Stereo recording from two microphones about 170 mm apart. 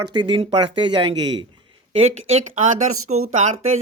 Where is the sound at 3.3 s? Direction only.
45° right (ahead or behind).